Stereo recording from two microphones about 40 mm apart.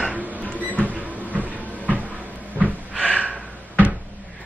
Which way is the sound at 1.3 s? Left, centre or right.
Right.